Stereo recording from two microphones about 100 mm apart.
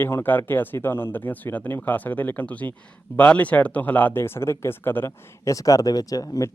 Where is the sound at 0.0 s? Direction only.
20° left (ahead or behind).